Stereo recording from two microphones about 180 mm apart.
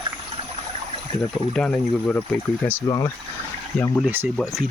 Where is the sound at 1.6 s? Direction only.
5° left (ahead or behind).